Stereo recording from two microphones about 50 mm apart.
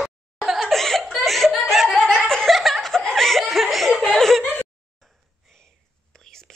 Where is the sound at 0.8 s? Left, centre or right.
Centre.